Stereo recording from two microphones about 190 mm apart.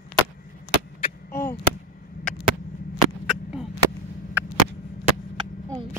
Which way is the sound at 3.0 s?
Centre (ahead or behind).